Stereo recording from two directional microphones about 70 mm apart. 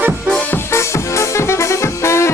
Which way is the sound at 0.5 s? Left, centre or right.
Left.